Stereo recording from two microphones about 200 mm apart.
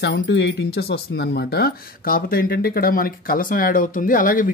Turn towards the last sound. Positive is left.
turn(degrees=45)  # may be behind; listen again after turning